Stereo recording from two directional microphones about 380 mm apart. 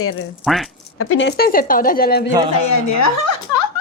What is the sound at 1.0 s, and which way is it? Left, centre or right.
Speech, left.